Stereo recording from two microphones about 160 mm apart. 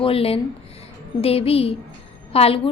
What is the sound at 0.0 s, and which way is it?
A woman's voice, 35° left (ahead or behind).